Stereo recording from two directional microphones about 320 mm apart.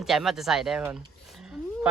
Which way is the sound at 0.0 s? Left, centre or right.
Centre.